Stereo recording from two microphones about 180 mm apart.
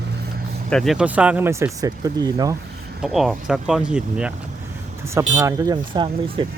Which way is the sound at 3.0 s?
Centre (ahead or behind).